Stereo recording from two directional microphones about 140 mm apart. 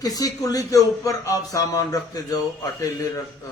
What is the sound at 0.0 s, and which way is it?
A man's voice, 25° left (ahead or behind).